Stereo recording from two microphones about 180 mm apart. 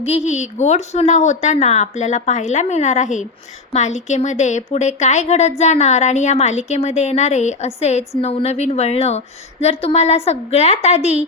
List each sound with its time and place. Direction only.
0.0 s speech: 35° left (ahead or behind)